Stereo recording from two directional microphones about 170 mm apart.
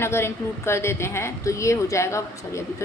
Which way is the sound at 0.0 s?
15° left (ahead or behind).